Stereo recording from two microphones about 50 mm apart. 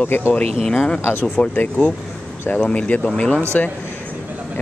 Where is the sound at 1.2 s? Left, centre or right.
Left.